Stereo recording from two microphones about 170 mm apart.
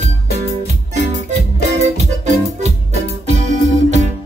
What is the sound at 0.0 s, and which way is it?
Music, 45° right (ahead or behind).